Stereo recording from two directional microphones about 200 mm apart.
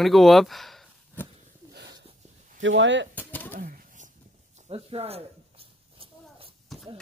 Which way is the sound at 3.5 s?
45° right (ahead or behind).